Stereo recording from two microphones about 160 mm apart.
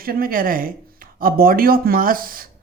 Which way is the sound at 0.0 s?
65° right (ahead or behind).